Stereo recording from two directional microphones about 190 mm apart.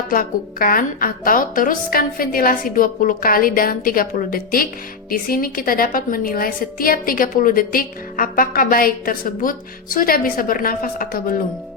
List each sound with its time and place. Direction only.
0.1 s a woman's voice: 50° left (ahead or behind)